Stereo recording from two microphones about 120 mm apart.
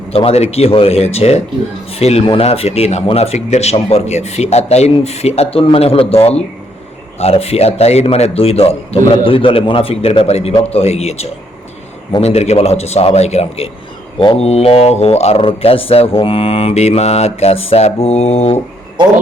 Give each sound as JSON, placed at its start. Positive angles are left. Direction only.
{"t": 0.1, "sound": "a man's voice", "side_deg": 55}
{"t": 15.4, "sound": "speech", "side_deg": 50}